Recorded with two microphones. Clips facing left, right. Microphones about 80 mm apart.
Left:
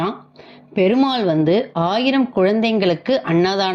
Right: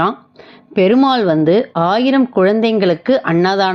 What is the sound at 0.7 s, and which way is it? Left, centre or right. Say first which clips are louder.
Speech: right 4 dB; right.